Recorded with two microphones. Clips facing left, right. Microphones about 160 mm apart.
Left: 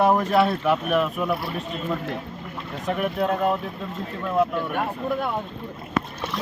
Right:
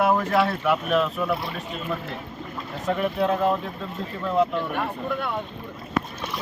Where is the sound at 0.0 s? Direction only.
15° left (ahead or behind).